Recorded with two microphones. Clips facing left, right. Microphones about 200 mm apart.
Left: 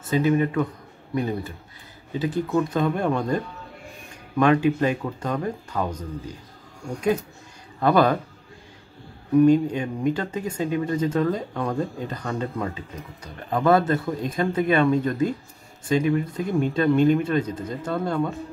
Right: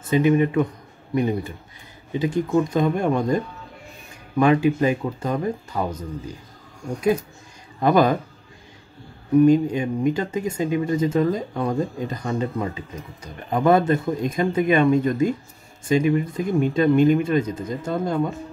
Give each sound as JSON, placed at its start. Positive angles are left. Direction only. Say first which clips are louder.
{"t": 0.1, "sound": "speech", "louder": "right 3 dB", "side_deg": -15}
{"t": 4.4, "sound": "speech", "louder": "right 1 dB", "side_deg": -10}
{"t": 7.8, "sound": "speech", "louder": "right 1 dB", "side_deg": -15}
{"t": 9.5, "sound": "speech", "louder": "right 1 dB", "side_deg": -10}